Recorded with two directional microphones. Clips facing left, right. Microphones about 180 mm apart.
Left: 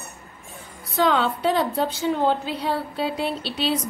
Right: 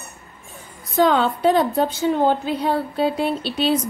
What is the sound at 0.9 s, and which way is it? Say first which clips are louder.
A woman's voice: right 4 dB; 45° right (ahead or behind).